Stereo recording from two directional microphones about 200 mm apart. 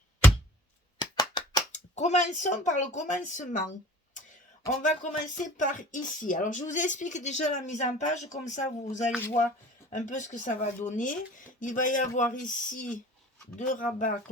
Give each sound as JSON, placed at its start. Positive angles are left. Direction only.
{"t": 0.9, "sound": "a sound", "side_deg": 20}
{"t": 1.7, "sound": "speech", "side_deg": 35}
{"t": 4.8, "sound": "speech", "side_deg": 40}
{"t": 9.1, "sound": "speech", "side_deg": 10}
{"t": 9.9, "sound": "speech", "side_deg": 35}